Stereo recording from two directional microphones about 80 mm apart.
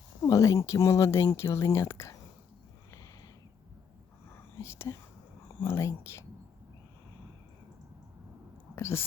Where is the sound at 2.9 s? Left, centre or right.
Left.